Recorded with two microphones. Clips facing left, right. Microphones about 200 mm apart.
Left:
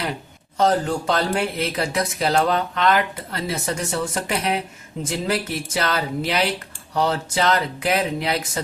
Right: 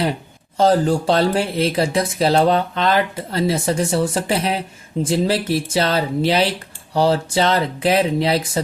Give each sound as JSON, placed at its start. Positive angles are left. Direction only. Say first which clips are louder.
{"t": 0.0, "sound": "speech", "louder": "right 6 dB", "side_deg": -30}